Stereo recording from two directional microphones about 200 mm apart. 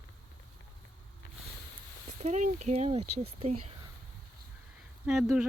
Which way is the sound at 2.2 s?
35° right (ahead or behind).